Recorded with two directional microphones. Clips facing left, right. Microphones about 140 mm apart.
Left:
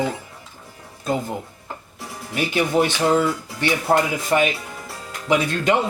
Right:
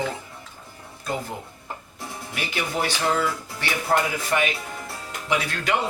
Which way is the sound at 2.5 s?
20° left (ahead or behind).